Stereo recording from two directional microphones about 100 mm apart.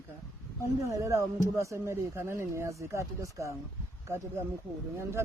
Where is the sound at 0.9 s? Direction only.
30° right (ahead or behind).